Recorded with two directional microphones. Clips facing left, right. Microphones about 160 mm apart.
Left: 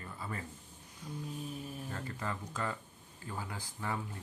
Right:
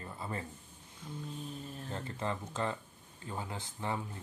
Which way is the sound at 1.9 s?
25° right (ahead or behind).